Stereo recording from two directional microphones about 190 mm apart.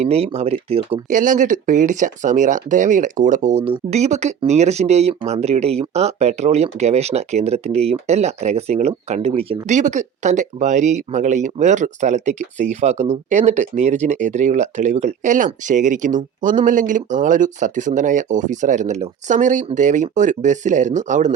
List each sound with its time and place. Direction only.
0.0 s speech: 35° right (ahead or behind)
1.1 s speech: 45° right (ahead or behind)